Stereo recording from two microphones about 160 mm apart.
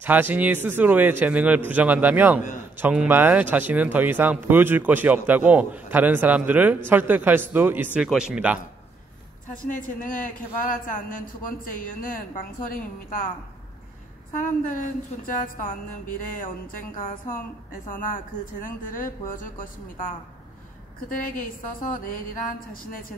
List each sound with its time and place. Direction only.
0.0 s speech: 10° right (ahead or behind)
9.7 s a man's voice: 60° left (ahead or behind)
14.3 s a man's voice: 55° left (ahead or behind)
21.1 s a man's voice: 60° left (ahead or behind)